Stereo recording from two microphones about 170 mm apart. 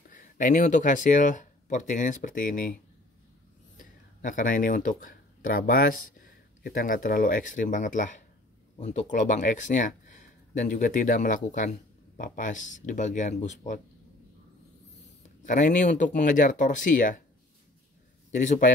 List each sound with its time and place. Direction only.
0.1 s speech: 50° left (ahead or behind)
15.2 s speech: 45° left (ahead or behind)
18.4 s speech: 45° left (ahead or behind)